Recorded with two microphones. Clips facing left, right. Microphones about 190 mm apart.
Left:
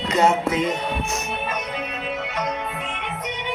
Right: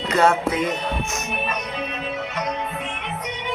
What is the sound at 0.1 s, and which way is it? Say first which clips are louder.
Music: even; 20° left (ahead or behind).